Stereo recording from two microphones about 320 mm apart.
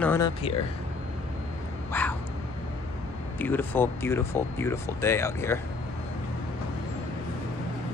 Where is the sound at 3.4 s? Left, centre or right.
Centre.